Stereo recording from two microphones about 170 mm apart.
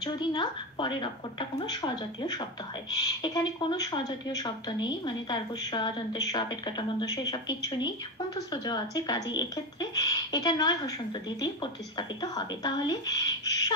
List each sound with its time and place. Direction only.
0.0 s a woman's voice: 25° left (ahead or behind)